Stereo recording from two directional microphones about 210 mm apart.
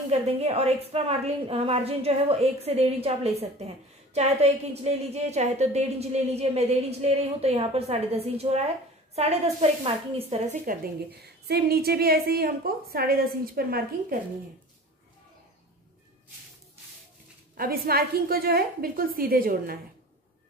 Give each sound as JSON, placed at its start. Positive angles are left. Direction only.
{"t": 0.1, "sound": "a woman's voice", "side_deg": -30}
{"t": 17.6, "sound": "a woman's voice", "side_deg": -45}